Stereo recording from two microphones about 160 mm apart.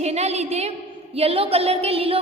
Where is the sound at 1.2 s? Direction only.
35° right (ahead or behind).